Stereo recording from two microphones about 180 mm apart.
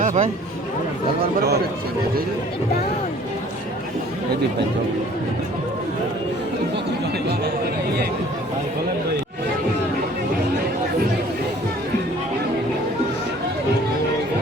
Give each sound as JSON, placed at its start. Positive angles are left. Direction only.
{"t": 0.0, "sound": "speech", "side_deg": -45}